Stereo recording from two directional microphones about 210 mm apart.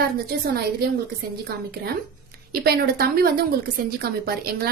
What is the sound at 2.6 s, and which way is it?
A woman's voice, 45° right (ahead or behind).